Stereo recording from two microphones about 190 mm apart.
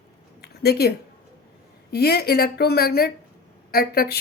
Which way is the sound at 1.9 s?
55° left (ahead or behind).